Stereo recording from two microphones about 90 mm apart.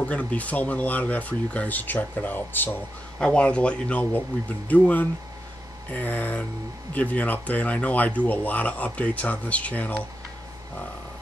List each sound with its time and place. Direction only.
0.0 s speech: 15° left (ahead or behind)
3.2 s speech: 10° left (ahead or behind)